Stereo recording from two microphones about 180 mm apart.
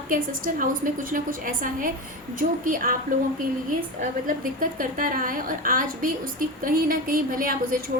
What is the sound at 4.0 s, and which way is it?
A woman's voice, 50° right (ahead or behind).